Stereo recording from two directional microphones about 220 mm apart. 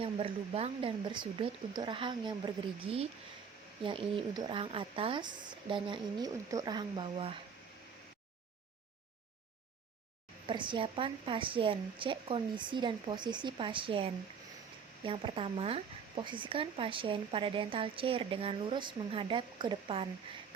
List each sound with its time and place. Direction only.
0.0 s speech: 25° right (ahead or behind)
10.4 s speech: 20° right (ahead or behind)